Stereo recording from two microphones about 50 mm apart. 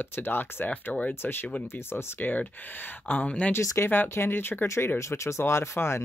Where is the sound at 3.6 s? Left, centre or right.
Left.